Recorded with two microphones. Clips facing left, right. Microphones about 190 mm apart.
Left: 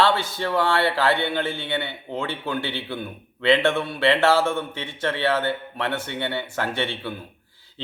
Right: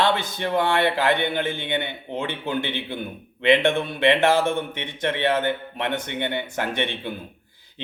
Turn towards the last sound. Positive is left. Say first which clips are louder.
# even
turn(degrees=-20)  # may be behind; listen again after turning